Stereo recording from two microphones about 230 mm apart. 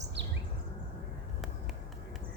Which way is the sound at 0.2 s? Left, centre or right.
Right.